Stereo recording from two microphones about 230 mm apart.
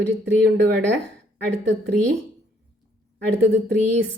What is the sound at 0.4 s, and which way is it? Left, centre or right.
A woman's voice, right.